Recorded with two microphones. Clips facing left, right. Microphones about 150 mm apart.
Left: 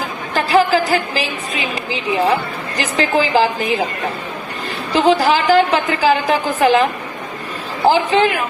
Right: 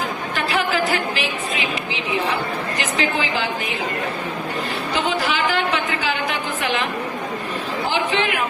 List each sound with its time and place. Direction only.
0.3 s a woman's voice: 35° left (ahead or behind)
2.7 s a woman's voice: 35° left (ahead or behind)
5.0 s a woman's voice: 35° left (ahead or behind)
7.9 s a woman's voice: 40° left (ahead or behind)